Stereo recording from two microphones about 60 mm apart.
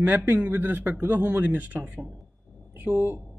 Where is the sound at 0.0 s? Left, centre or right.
Right.